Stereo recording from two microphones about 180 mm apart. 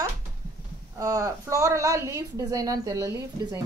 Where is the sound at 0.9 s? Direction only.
20° right (ahead or behind).